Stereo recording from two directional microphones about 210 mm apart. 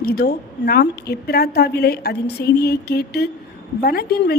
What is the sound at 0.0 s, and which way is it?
A woman's voice, 45° left (ahead or behind).